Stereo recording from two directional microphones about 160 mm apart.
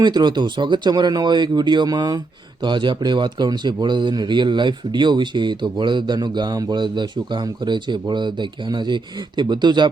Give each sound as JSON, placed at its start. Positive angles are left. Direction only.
{"t": 0.0, "sound": "speech", "side_deg": -25}